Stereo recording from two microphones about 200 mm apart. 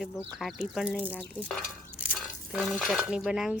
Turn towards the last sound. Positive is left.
turn(degrees=0)  # may be behind; listen again after turning